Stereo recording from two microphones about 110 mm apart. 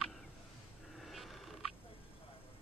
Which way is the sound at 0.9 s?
Centre (ahead or behind).